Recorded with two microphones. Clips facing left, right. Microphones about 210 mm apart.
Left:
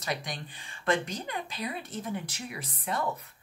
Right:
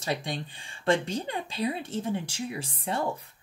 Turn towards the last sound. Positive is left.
turn(degrees=-30)  # may be behind; listen again after turning